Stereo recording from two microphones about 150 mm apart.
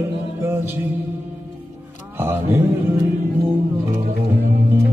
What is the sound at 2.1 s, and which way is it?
Music, 15° right (ahead or behind).